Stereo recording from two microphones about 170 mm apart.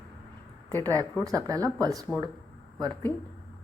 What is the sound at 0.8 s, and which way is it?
Speech, 20° right (ahead or behind).